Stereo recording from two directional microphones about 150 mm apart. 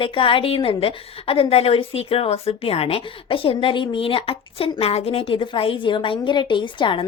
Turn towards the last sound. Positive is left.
turn(degrees=35)  # may be behind; listen again after turning